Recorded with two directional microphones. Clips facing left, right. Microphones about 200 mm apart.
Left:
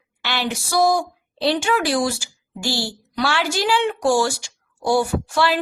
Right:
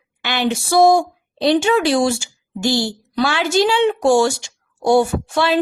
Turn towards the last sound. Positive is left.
turn(degrees=-20)  # may be behind; listen again after turning